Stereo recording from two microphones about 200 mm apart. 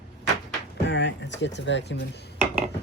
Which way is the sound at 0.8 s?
65° left (ahead or behind).